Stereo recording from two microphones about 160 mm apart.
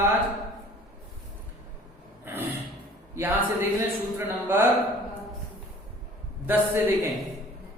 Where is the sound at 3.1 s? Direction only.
15° right (ahead or behind).